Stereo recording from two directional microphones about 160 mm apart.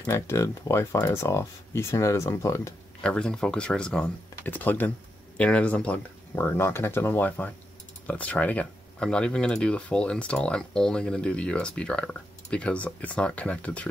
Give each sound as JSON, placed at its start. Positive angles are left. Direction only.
{"t": 0.0, "sound": "speech", "side_deg": 15}
{"t": 3.0, "sound": "speech", "side_deg": 5}